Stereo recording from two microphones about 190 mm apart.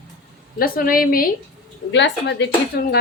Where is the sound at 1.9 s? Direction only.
70° left (ahead or behind).